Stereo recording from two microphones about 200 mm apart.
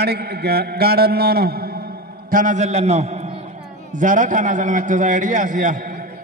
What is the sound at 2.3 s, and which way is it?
A man's voice, 40° right (ahead or behind).